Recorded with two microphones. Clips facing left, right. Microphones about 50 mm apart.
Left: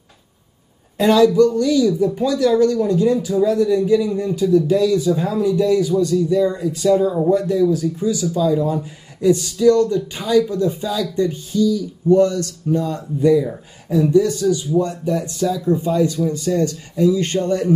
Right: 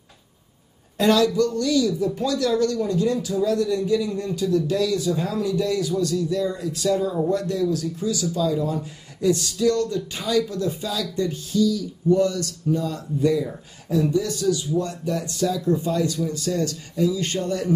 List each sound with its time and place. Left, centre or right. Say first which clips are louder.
0.9 s speech: left 6 dB; centre
17.4 s speech: left 6 dB; centre